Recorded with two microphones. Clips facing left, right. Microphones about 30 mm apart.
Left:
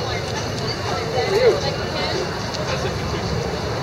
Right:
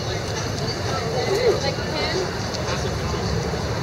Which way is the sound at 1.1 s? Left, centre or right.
Centre.